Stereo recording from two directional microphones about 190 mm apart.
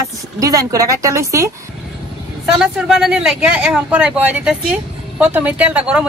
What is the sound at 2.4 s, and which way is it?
Speech, 5° right (ahead or behind).